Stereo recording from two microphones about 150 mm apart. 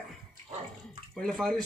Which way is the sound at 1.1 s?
5° left (ahead or behind).